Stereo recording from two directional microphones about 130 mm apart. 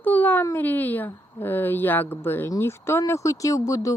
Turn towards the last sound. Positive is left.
turn(degrees=25)  # may be behind; listen again after turning